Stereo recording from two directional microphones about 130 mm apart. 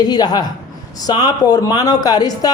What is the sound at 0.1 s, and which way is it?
A man's voice, 30° left (ahead or behind).